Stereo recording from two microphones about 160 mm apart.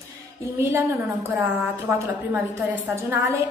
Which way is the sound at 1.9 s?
15° right (ahead or behind).